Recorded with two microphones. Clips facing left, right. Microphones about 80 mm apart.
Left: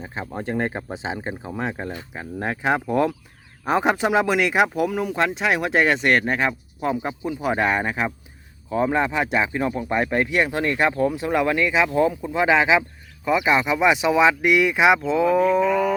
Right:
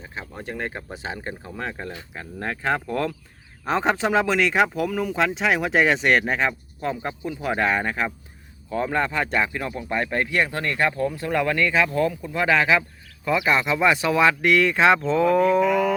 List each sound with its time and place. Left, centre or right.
0.0 s speech: left; by 16.0 s centre